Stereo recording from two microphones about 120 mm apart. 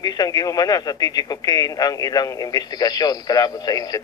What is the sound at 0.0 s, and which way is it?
A man's voice, 30° left (ahead or behind).